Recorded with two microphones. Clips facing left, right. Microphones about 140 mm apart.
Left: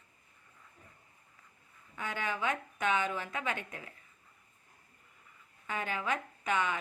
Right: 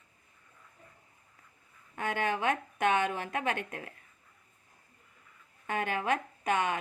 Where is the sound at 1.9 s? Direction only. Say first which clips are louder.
Right 5 dB; 55° right (ahead or behind).